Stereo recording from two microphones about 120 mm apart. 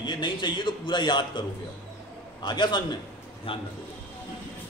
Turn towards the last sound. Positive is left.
turn(degrees=50)  # may be behind; listen again after turning